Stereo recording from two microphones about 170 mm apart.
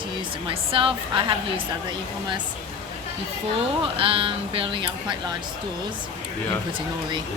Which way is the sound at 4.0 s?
30° right (ahead or behind).